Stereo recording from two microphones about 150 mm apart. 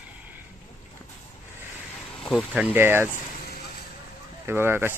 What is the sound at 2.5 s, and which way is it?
Speech, 10° right (ahead or behind).